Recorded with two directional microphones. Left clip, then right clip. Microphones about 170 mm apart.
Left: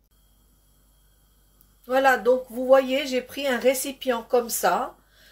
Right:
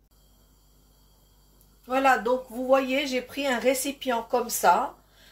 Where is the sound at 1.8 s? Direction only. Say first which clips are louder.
Left 3 dB; 40° left (ahead or behind).